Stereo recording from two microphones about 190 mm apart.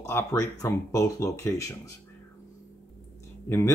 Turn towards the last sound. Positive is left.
turn(degrees=15)  # may be behind; listen again after turning